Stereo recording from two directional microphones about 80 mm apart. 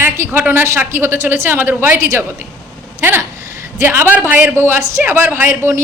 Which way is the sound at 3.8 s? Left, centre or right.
Right.